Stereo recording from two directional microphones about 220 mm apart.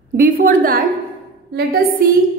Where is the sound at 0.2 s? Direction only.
40° right (ahead or behind).